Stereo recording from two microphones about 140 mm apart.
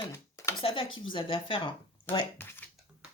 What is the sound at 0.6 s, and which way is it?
Speech, 40° left (ahead or behind).